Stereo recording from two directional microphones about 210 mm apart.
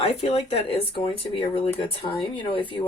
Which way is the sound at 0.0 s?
30° left (ahead or behind).